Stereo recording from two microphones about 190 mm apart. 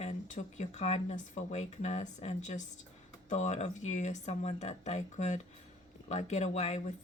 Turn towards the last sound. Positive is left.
turn(degrees=35)  # may be behind; listen again after turning